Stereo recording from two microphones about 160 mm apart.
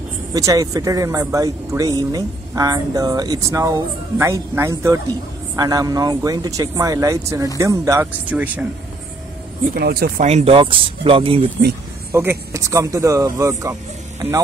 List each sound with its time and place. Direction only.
0.3 s speech: 20° right (ahead or behind)
9.8 s speech: 70° right (ahead or behind)
10.2 s speech: 40° right (ahead or behind)
12.1 s speech: 15° right (ahead or behind)